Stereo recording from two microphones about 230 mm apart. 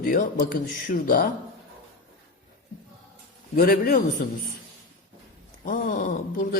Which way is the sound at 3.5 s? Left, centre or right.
Left.